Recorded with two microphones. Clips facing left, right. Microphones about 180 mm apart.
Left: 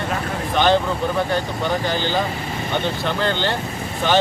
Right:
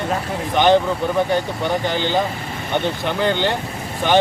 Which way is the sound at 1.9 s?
20° right (ahead or behind).